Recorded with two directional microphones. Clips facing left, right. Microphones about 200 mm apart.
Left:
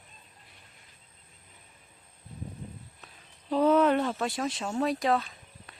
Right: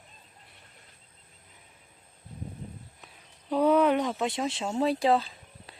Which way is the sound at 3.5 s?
10° right (ahead or behind).